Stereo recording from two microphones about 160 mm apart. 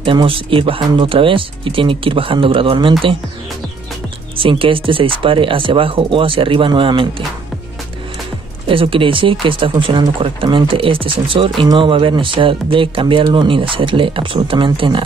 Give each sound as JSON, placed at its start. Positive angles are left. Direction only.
{"t": 0.0, "sound": "speech", "side_deg": -35}
{"t": 4.4, "sound": "speech", "side_deg": -35}
{"t": 8.6, "sound": "speech", "side_deg": -35}